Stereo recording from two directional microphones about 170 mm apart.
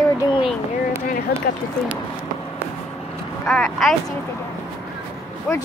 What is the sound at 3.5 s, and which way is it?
Speech, centre (ahead or behind).